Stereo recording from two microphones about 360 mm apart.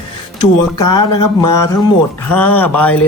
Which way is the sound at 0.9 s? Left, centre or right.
Centre.